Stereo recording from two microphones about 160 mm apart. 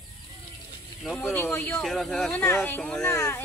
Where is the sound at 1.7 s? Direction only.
Centre (ahead or behind).